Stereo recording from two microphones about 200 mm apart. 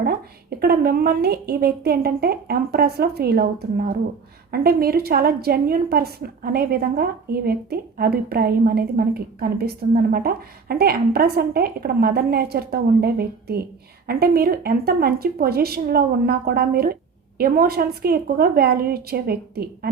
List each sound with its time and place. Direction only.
0.0 s a woman's voice: 50° right (ahead or behind)